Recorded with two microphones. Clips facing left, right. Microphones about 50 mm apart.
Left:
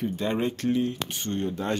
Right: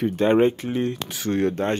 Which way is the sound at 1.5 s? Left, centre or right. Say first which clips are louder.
Right 5 dB; right.